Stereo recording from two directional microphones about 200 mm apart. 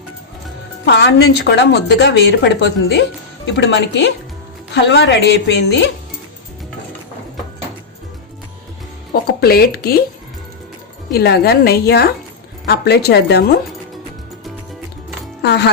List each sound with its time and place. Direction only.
0.9 s a woman's voice: 55° left (ahead or behind)
9.4 s a woman's voice: 50° left (ahead or behind)
11.1 s a woman's voice: 55° left (ahead or behind)
15.4 s speech: 55° left (ahead or behind)